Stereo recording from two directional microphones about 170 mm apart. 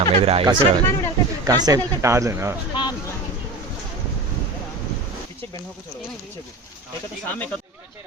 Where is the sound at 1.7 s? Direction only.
20° right (ahead or behind).